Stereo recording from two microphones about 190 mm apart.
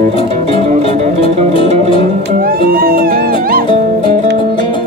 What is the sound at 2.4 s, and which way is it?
Music, 50° right (ahead or behind).